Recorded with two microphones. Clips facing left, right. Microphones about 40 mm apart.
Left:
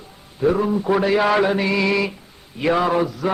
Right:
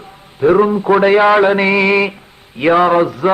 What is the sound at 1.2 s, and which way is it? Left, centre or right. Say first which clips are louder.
Mantra: right 7 dB; right.